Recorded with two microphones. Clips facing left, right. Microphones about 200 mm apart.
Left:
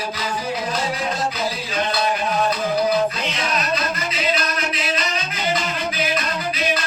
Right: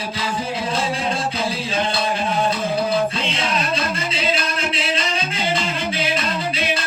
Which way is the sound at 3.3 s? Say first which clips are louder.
Right 1 dB; 30° right (ahead or behind).